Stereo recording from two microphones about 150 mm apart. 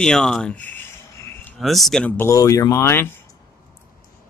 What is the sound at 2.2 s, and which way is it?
Speech, 20° left (ahead or behind).